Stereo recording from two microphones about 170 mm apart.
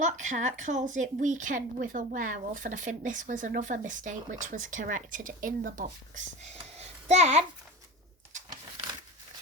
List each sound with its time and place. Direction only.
0.0 s a woman's voice: 45° right (ahead or behind)